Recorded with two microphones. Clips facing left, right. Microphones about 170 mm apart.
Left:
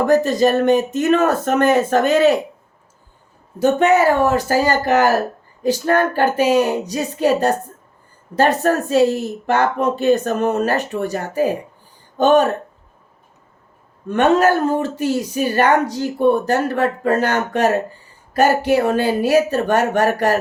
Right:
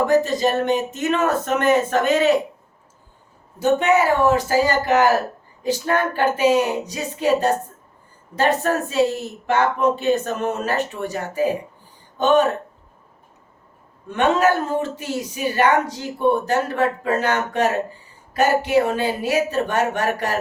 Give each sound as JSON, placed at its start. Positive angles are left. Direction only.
{"t": 0.1, "sound": "speech", "side_deg": 40}
{"t": 3.8, "sound": "speech", "side_deg": 40}
{"t": 14.1, "sound": "speech", "side_deg": 40}